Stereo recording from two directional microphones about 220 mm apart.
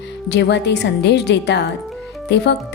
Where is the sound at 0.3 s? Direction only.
50° left (ahead or behind).